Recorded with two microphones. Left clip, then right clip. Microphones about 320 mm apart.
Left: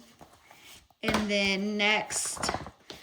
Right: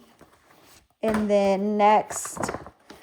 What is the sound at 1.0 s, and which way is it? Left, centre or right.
Speech, centre.